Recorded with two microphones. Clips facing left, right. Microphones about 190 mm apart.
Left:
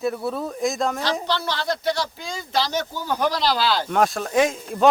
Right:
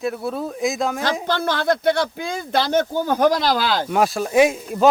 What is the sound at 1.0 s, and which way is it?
Speech, 50° right (ahead or behind).